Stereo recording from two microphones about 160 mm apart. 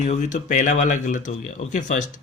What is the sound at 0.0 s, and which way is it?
Speech, 45° left (ahead or behind).